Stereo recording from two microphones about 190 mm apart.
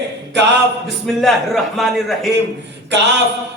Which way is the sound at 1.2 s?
Centre (ahead or behind).